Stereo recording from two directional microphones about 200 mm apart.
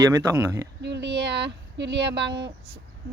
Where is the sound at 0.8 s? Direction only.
60° right (ahead or behind).